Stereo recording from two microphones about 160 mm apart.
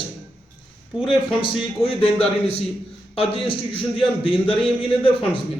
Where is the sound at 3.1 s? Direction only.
35° left (ahead or behind).